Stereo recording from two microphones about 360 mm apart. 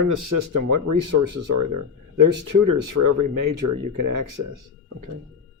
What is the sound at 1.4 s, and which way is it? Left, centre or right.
Speech, right.